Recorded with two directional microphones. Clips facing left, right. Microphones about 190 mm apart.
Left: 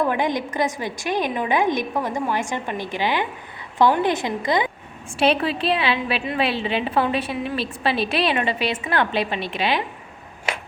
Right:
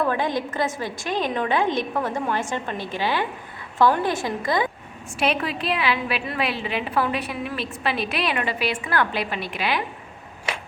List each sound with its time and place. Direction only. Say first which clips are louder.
0.0 s a woman's voice: left 1 dB; 15° left (ahead or behind)
5.2 s a woman's voice: left 4 dB; 30° left (ahead or behind)